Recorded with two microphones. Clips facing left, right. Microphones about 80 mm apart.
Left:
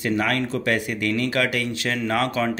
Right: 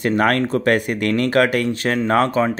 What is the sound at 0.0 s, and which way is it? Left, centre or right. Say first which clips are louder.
Speech: right 6 dB; right.